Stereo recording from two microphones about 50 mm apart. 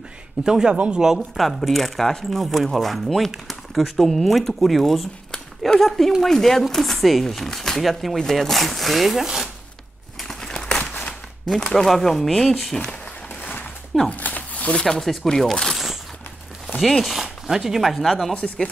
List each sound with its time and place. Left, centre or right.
0.4 s speech: centre
0.7 s speech: right
1.0 s speech: centre
10.2 s a sound: centre
11.4 s speech: centre
13.4 s a sound: left
14.8 s speech: centre
15.7 s a sound: centre
16.8 s speech: centre
18.3 s speech: left